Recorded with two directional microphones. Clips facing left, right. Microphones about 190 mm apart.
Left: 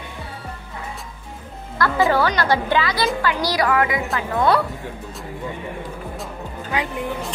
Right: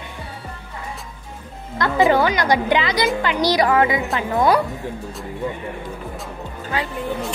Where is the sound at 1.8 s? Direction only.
20° right (ahead or behind).